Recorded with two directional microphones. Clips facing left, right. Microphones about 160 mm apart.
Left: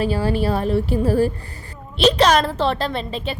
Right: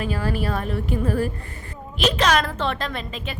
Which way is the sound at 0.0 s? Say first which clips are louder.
Left 5 dB; 30° left (ahead or behind).